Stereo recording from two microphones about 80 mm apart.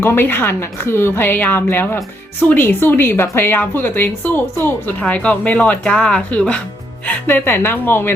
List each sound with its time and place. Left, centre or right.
0.0 s a woman's voice: left
7.3 s a woman's voice: left